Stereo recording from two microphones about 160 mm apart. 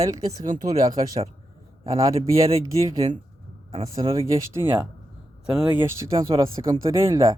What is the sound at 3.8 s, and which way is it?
Speech, 20° right (ahead or behind).